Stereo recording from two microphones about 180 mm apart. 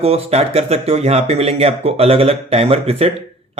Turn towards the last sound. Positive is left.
turn(degrees=-35)  # may be behind; listen again after turning